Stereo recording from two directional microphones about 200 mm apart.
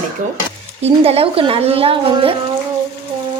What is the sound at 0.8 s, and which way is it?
A woman's voice, 30° right (ahead or behind).